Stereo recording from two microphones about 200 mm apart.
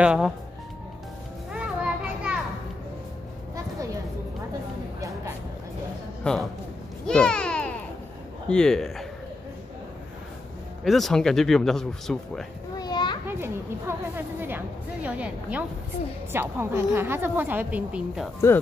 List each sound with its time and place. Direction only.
0.0 s speech: 5° right (ahead or behind)
1.5 s children playing: 5° right (ahead or behind)
3.5 s a sound: 15° right (ahead or behind)
6.2 s speech: 5° left (ahead or behind)
7.1 s a sound: 5° left (ahead or behind)
8.5 s speech: 5° left (ahead or behind)
10.8 s speech: centre (ahead or behind)
12.7 s children playing: 20° left (ahead or behind)
13.3 s speech: 10° right (ahead or behind)